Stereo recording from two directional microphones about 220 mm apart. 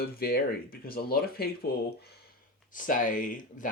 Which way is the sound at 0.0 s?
45° left (ahead or behind).